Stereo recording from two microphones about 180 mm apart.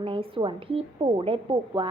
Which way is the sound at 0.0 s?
30° right (ahead or behind).